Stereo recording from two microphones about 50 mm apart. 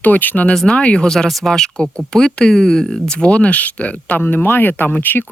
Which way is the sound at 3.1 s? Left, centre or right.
Left.